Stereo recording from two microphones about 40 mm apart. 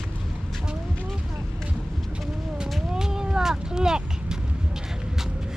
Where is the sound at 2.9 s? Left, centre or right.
Centre.